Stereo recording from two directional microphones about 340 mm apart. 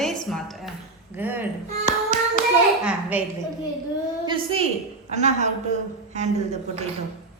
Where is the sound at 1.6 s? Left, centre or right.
Right.